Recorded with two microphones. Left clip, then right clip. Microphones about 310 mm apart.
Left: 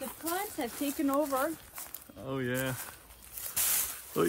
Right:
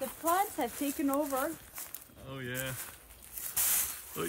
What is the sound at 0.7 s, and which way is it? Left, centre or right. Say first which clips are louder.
Speech: left 2 dB; centre.